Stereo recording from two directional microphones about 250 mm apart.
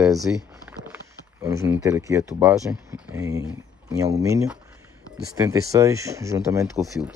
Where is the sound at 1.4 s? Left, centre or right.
Centre.